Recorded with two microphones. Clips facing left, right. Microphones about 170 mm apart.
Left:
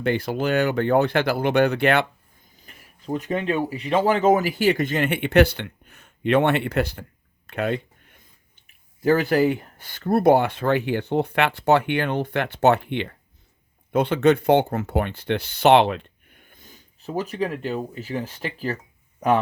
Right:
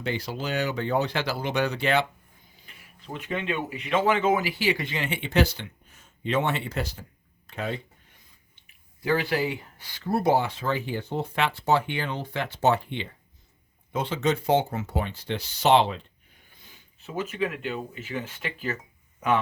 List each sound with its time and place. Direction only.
0.0 s speech: 55° left (ahead or behind)
2.6 s speech: 45° left (ahead or behind); by 7.0 s 60° left (ahead or behind)
7.4 s a sound: 65° left (ahead or behind)
9.0 s speech: 45° left (ahead or behind); by 16.0 s 65° left (ahead or behind)
16.6 s speech: 40° left (ahead or behind)